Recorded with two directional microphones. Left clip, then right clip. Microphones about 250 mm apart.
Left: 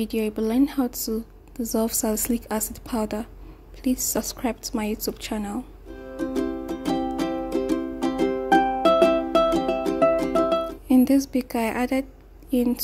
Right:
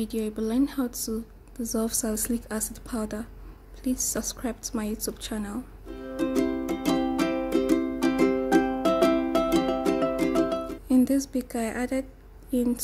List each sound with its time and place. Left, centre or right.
0.0 s a woman's voice: centre
6.1 s music: centre
6.9 s music: left
8.8 s music: centre
9.5 s music: left
9.9 s music: centre